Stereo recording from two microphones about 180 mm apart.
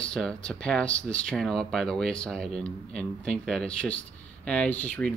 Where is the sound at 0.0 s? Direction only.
5° left (ahead or behind).